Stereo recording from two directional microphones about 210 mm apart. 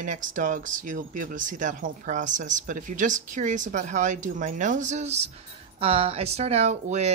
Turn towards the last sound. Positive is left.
turn(degrees=-30)  # may be behind; listen again after turning